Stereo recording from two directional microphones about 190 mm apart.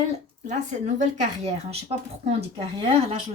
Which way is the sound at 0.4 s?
40° right (ahead or behind).